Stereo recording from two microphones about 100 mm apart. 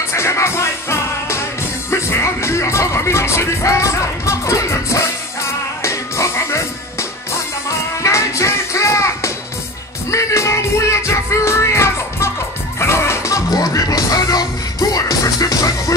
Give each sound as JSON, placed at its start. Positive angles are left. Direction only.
{"t": 0.1, "sound": "music", "side_deg": 30}